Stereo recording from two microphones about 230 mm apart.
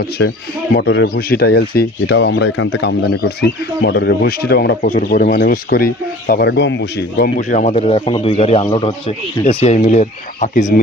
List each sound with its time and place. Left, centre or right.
0.2 s speech: left
7.3 s a man's voice: left